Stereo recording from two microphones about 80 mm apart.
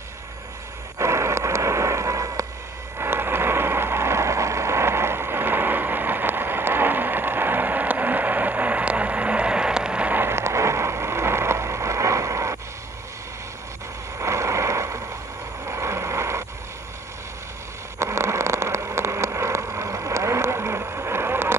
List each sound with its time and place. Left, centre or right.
0.9 s a sound: right
3.0 s vehicle: right
10.2 s vehicle: right
14.1 s a sound: right
15.6 s vehicle: right
17.9 s vehicle: right